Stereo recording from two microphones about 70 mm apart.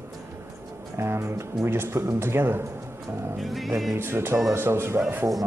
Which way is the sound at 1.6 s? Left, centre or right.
Right.